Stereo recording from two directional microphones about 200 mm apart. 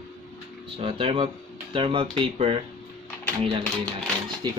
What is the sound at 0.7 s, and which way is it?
Speech, 25° right (ahead or behind).